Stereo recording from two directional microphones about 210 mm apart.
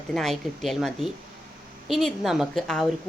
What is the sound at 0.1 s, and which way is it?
Speech, centre (ahead or behind).